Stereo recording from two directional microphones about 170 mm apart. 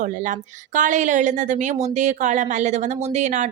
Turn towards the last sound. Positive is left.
turn(degrees=-45)  # may be behind; listen again after turning